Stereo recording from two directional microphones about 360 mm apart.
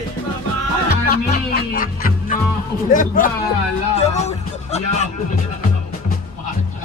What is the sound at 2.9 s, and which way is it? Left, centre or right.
Speech, left.